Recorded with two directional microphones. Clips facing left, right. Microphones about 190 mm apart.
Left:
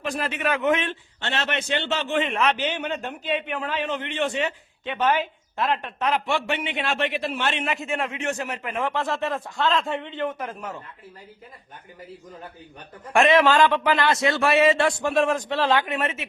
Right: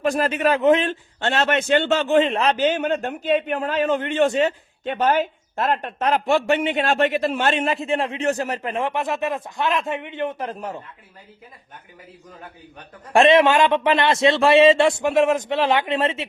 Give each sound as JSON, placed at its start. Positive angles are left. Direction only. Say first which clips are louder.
{"t": 0.0, "sound": "a man's voice", "louder": "right 7 dB", "side_deg": -45}
{"t": 8.9, "sound": "a man's voice", "louder": "right 2 dB", "side_deg": -15}
{"t": 13.1, "sound": "a man's voice", "louder": "right 3 dB", "side_deg": -25}